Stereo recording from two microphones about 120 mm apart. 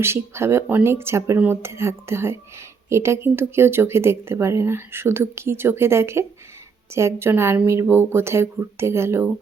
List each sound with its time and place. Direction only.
0.0 s speech: 20° right (ahead or behind)